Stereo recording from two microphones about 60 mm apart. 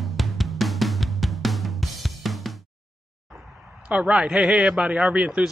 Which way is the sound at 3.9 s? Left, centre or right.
Centre.